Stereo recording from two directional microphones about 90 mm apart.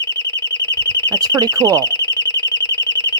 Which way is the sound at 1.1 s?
45° right (ahead or behind).